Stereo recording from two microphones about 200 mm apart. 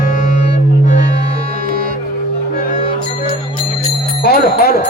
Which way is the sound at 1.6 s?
45° right (ahead or behind).